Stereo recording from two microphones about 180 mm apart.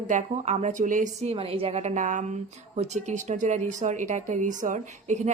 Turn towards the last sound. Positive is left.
turn(degrees=-40)  # may be behind; listen again after turning